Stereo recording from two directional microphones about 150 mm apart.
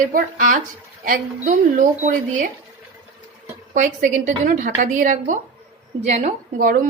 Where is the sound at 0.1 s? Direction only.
65° right (ahead or behind).